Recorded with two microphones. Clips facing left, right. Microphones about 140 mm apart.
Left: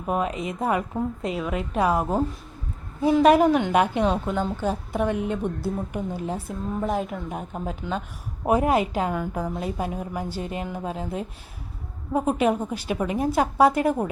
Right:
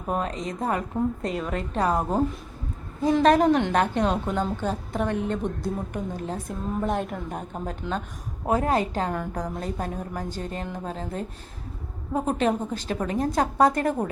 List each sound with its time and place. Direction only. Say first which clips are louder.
0.1 s a woman's voice: left 2 dB; 10° left (ahead or behind)